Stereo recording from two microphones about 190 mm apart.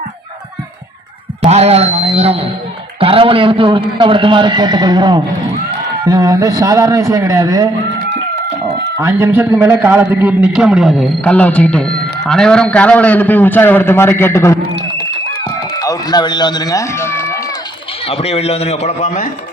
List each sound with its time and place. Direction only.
1.5 s a man's voice: 35° right (ahead or behind)
9.0 s a man's voice: 15° right (ahead or behind); by 14.6 s 15° left (ahead or behind)
15.8 s a man's voice: 20° left (ahead or behind)
18.0 s a man's voice: 30° left (ahead or behind)